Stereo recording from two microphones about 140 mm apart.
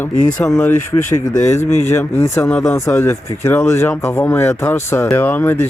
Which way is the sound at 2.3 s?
15° left (ahead or behind).